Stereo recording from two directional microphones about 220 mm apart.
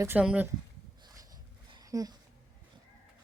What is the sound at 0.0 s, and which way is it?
Speech, 5° right (ahead or behind).